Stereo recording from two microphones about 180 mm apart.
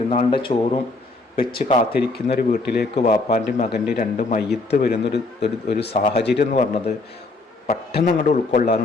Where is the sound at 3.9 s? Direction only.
45° left (ahead or behind).